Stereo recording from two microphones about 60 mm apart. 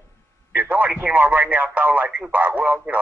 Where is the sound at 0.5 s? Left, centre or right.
Right.